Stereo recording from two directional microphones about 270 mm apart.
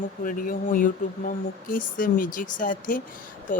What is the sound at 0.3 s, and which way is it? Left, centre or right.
A woman's voice, left.